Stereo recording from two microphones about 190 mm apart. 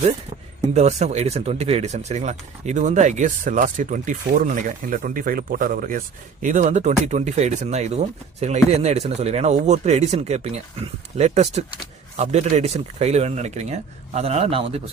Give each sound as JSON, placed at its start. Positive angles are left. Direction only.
{"t": 0.7, "sound": "speech", "side_deg": -35}